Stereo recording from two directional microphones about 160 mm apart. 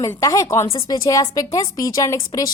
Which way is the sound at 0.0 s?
20° left (ahead or behind).